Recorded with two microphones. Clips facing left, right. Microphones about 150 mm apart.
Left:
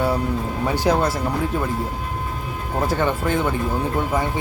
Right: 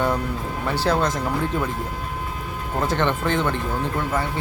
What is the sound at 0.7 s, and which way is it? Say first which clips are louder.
Speech: left 2 dB; 10° left (ahead or behind).